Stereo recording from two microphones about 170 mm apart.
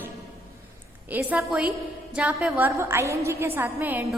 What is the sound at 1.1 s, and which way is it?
A woman's voice, 10° right (ahead or behind).